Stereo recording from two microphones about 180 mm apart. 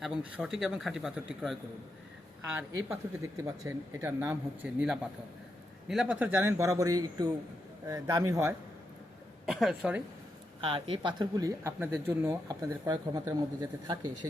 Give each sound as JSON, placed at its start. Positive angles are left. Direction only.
{"t": 0.0, "sound": "speech", "side_deg": -5}
{"t": 2.6, "sound": "speech", "side_deg": -15}
{"t": 9.5, "sound": "speech", "side_deg": 0}
{"t": 10.6, "sound": "speech", "side_deg": -30}